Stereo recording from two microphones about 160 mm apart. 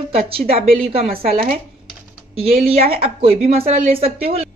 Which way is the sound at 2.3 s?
40° right (ahead or behind).